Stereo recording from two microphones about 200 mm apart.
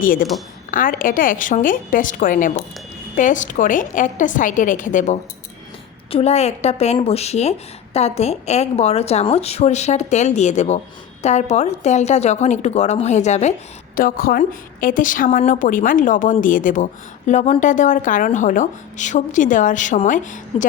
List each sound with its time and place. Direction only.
0.0 s a woman's voice: 45° left (ahead or behind)
13.9 s a woman's voice: 45° left (ahead or behind)